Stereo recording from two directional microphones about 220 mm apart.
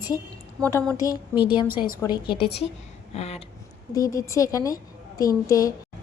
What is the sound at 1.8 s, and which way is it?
A woman's voice, 20° left (ahead or behind).